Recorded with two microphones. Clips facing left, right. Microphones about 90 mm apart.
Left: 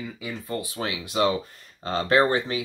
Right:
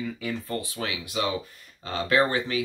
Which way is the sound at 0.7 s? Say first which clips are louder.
Left 3 dB; 30° left (ahead or behind).